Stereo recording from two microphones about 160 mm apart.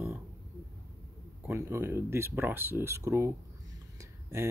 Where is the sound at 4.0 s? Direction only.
15° right (ahead or behind).